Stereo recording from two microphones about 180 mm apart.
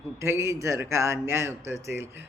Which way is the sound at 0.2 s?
15° right (ahead or behind).